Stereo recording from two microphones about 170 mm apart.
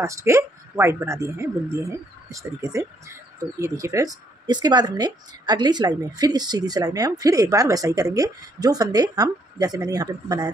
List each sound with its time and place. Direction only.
0.0 s speech: 15° right (ahead or behind)